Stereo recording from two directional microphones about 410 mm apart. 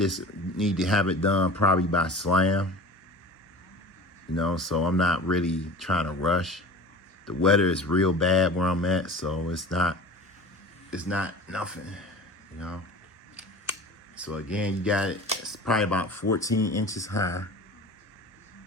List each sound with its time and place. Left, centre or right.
0.0 s speech: centre
4.4 s speech: centre
14.2 s speech: centre
16.6 s speech: left
16.9 s speech: centre